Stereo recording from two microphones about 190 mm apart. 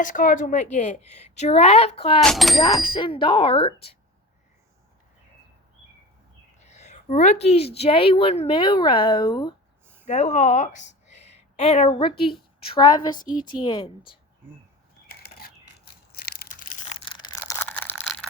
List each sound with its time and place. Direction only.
0.0 s a woman's voice: 45° left (ahead or behind)
2.2 s speech: centre (ahead or behind)
2.8 s a woman's voice: 25° left (ahead or behind)
6.6 s a woman's voice: 35° left (ahead or behind)
10.1 s a woman's voice: 35° left (ahead or behind)
15.0 s tearing: 55° left (ahead or behind)
16.8 s crushing: 30° left (ahead or behind)
17.5 s crushing: 10° left (ahead or behind)